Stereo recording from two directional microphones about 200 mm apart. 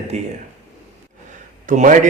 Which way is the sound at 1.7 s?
40° right (ahead or behind).